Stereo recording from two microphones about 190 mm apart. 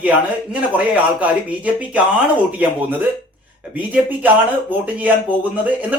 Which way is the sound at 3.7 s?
10° right (ahead or behind).